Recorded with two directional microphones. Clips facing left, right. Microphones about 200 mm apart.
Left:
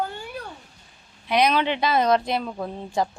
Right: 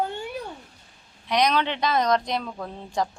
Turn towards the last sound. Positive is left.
turn(degrees=5)  # may be behind; listen again after turning